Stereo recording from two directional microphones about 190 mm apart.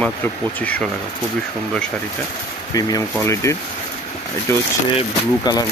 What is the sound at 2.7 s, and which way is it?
Speech, 20° left (ahead or behind).